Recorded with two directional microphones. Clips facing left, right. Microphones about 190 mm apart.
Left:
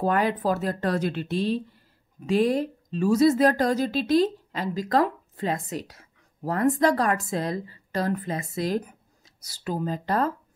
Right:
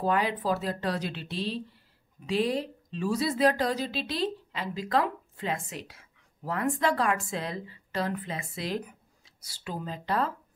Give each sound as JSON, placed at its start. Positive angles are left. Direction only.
{"t": 0.0, "sound": "a woman's voice", "side_deg": 50}